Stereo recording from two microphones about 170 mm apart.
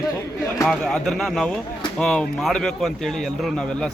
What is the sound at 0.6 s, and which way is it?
Speech, 5° left (ahead or behind).